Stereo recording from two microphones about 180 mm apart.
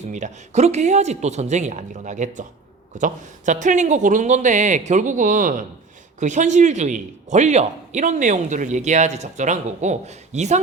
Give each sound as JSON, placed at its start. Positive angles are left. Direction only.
{"t": 0.1, "sound": "a man's voice", "side_deg": -40}